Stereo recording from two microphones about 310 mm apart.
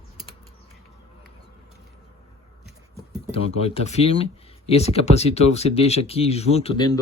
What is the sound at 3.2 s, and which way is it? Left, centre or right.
Speech, centre.